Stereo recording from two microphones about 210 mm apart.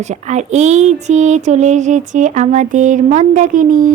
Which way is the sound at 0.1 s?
35° right (ahead or behind).